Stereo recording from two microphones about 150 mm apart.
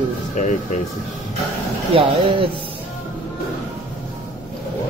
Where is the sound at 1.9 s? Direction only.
40° right (ahead or behind).